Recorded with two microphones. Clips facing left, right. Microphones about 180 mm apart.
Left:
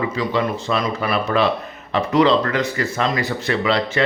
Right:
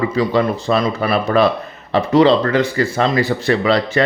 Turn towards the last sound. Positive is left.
turn(degrees=-40)  # may be behind; listen again after turning